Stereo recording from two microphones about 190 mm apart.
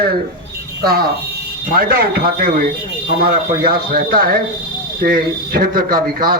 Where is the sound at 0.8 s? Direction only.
55° right (ahead or behind).